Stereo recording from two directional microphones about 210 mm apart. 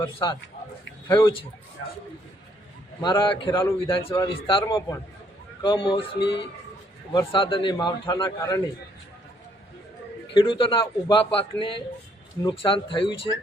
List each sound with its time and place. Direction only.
0.0 s a man's voice: 20° left (ahead or behind)
3.0 s a man's voice: 20° left (ahead or behind)
7.1 s a man's voice: 25° left (ahead or behind)
10.3 s a man's voice: 25° left (ahead or behind)